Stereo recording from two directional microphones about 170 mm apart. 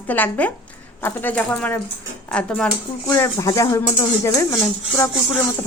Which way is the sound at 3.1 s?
15° left (ahead or behind).